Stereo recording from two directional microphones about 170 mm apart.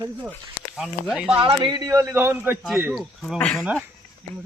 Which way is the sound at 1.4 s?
30° right (ahead or behind).